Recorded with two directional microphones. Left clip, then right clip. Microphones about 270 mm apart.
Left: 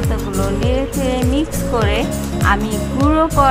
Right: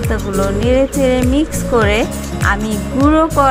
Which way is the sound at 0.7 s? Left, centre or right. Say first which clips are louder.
Right 9 dB; centre.